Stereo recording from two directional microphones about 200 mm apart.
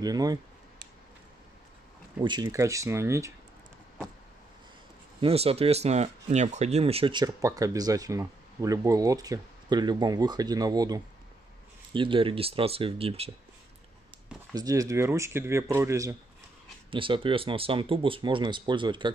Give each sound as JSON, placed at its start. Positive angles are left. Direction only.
{"t": 0.0, "sound": "a sound", "side_deg": -20}
{"t": 2.2, "sound": "speech", "side_deg": -20}
{"t": 5.2, "sound": "speech", "side_deg": -30}
{"t": 14.5, "sound": "speech", "side_deg": -20}
{"t": 16.9, "sound": "speech", "side_deg": -25}